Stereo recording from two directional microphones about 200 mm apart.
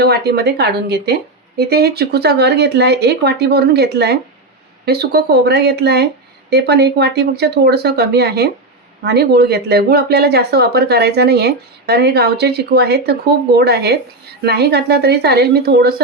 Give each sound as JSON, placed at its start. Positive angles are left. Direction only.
{"t": 0.0, "sound": "a woman's voice", "side_deg": -55}